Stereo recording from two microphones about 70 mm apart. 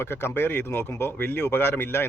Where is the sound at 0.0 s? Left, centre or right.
Left.